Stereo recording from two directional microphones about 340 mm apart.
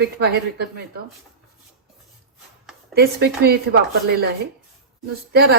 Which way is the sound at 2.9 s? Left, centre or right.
Right.